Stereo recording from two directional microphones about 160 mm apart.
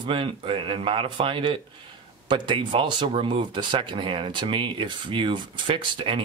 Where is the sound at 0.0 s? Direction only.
35° right (ahead or behind).